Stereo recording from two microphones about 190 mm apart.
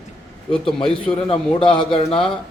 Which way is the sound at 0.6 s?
25° left (ahead or behind).